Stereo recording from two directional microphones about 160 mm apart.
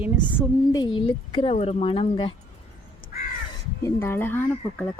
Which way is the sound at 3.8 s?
15° left (ahead or behind).